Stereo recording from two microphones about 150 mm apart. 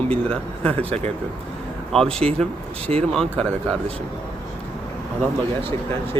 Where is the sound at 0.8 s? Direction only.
40° right (ahead or behind).